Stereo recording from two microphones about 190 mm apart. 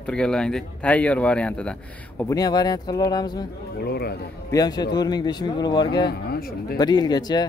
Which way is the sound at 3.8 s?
55° left (ahead or behind).